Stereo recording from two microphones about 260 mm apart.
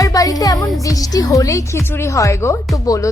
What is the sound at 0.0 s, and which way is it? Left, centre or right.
Speech, centre.